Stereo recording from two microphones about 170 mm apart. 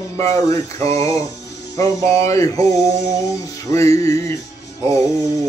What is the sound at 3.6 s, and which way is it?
Music, 15° left (ahead or behind).